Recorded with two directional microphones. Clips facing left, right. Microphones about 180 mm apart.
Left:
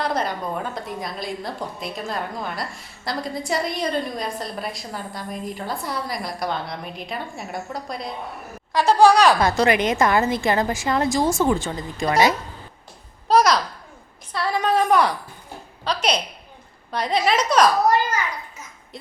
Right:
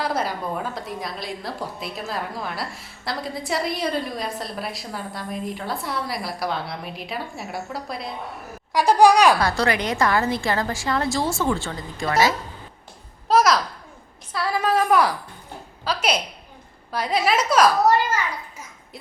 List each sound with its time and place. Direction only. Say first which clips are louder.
0.0 s a woman's voice: left 1 dB; 5° right (ahead or behind)
9.4 s a woman's voice: left 3 dB; 20° left (ahead or behind)
13.2 s a sound: left 1 dB; 5° right (ahead or behind)
15.8 s a woman's voice: left 1 dB; 5° right (ahead or behind)